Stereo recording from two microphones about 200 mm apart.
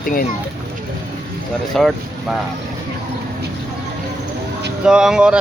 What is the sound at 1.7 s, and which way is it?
Speech, centre (ahead or behind).